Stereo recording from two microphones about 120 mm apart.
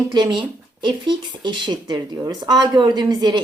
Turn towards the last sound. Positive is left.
turn(degrees=-35)  # may be behind; listen again after turning